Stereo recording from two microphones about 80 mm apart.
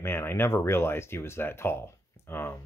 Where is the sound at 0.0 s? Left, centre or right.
Left.